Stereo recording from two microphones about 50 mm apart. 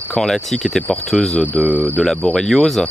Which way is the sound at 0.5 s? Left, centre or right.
Centre.